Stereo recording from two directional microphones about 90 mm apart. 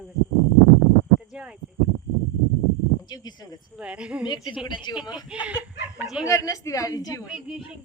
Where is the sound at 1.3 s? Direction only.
10° right (ahead or behind).